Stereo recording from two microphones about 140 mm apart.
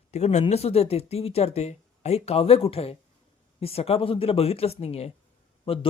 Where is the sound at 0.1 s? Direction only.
55° left (ahead or behind).